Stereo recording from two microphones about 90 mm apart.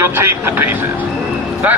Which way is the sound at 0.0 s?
30° right (ahead or behind).